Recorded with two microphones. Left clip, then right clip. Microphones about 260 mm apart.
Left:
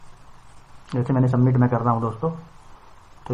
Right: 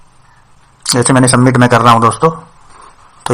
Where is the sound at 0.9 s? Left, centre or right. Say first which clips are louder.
Right 15 dB; right.